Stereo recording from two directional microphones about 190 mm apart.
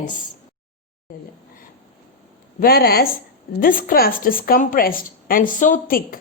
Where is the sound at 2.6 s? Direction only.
55° left (ahead or behind).